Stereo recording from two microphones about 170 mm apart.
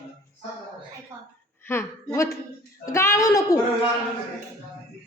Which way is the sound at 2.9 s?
15° left (ahead or behind).